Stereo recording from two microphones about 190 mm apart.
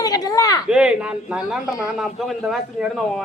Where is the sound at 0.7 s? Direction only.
5° right (ahead or behind).